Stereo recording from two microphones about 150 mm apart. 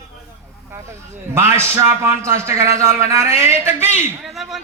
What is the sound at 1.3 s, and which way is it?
A man's voice, 15° right (ahead or behind).